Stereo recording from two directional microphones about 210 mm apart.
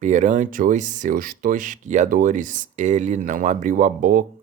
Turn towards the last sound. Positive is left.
turn(degrees=-40)  # may be behind; listen again after turning